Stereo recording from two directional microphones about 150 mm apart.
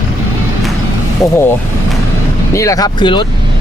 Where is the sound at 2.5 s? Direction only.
20° left (ahead or behind).